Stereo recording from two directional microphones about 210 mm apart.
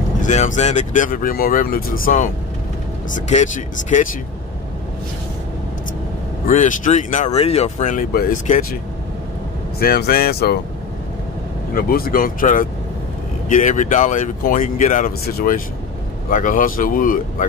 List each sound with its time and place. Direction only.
0.2 s speech: 35° left (ahead or behind)
6.5 s speech: 35° left (ahead or behind)
9.8 s speech: 45° left (ahead or behind)
11.7 s speech: 45° left (ahead or behind)